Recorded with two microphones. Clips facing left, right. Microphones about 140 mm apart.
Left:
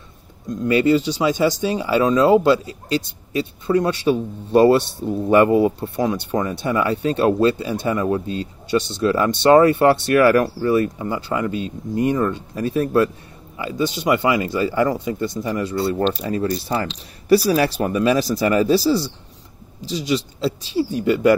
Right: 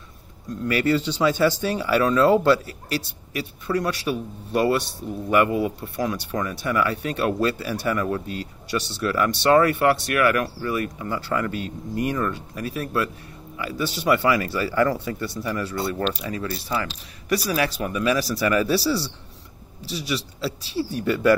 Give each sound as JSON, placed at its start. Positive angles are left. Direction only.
{"t": 0.5, "sound": "speech", "side_deg": 20}
{"t": 11.1, "sound": "speech", "side_deg": 20}
{"t": 19.8, "sound": "speech", "side_deg": 20}